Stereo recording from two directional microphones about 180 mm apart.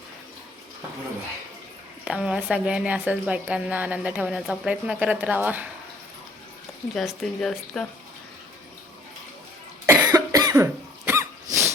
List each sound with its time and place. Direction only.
2.0 s a woman's voice: 5° right (ahead or behind)
6.9 s a woman's voice: centre (ahead or behind)
9.8 s cough: 15° right (ahead or behind)